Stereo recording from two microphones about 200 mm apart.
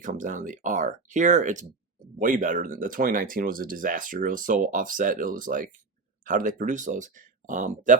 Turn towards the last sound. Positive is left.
turn(degrees=-40)  # may be behind; listen again after turning